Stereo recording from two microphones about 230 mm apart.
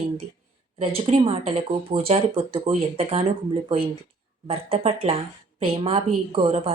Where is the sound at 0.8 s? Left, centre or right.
Right.